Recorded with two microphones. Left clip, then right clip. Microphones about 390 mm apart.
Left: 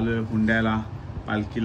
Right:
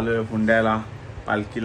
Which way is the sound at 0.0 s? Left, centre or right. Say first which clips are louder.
Right 3 dB; right.